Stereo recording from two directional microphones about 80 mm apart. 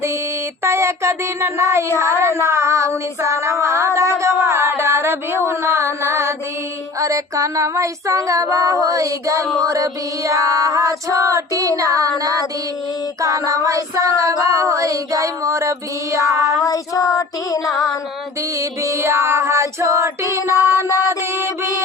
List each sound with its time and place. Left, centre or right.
0.6 s child singing: right
16.6 s child singing: left
18.6 s child singing: right
20.5 s child singing: left
21.2 s child singing: right